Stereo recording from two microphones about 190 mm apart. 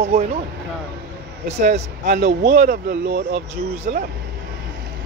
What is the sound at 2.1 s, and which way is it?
Speech, 60° right (ahead or behind).